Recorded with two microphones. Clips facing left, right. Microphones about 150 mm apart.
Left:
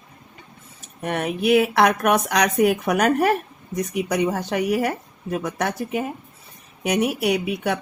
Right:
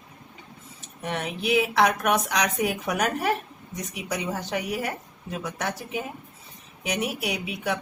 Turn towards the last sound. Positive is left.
turn(degrees=60)  # may be behind; listen again after turning